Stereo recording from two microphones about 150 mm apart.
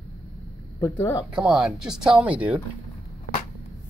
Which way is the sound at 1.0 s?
20° left (ahead or behind).